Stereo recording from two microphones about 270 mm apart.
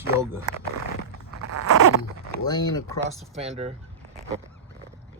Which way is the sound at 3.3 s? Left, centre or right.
Right.